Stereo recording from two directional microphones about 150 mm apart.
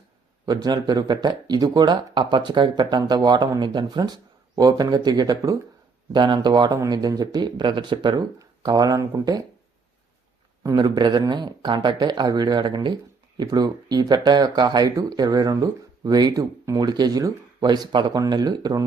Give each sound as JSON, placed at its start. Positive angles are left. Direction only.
{"t": 0.4, "sound": "speech", "side_deg": -25}
{"t": 10.6, "sound": "speech", "side_deg": -25}